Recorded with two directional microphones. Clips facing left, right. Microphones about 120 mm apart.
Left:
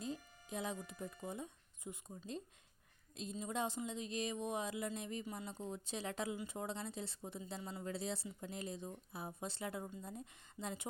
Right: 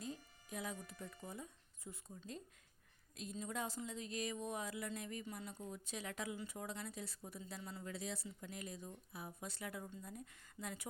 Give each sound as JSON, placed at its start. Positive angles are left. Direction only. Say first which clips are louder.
{"t": 0.0, "sound": "speech", "louder": "left 4 dB", "side_deg": 25}